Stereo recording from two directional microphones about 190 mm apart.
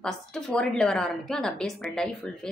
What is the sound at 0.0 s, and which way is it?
A woman's voice, 5° left (ahead or behind).